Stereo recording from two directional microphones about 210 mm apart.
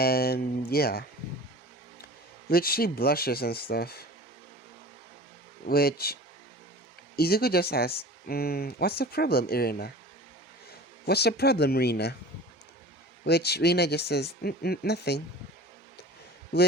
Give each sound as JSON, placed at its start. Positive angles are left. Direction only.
{"t": 0.0, "sound": "speech", "side_deg": 45}
{"t": 2.5, "sound": "speech", "side_deg": 45}
{"t": 5.6, "sound": "speech", "side_deg": 45}
{"t": 7.2, "sound": "speech", "side_deg": 45}
{"t": 11.0, "sound": "speech", "side_deg": 50}
{"t": 13.2, "sound": "speech", "side_deg": 50}